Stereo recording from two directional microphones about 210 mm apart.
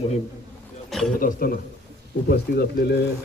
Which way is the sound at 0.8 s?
Centre (ahead or behind).